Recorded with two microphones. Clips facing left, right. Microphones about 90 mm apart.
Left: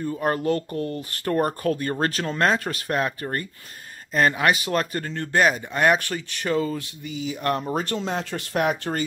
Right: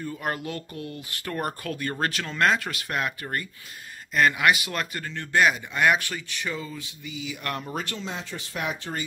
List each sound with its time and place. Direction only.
0.0 s speech: 35° left (ahead or behind); by 9.0 s 50° left (ahead or behind)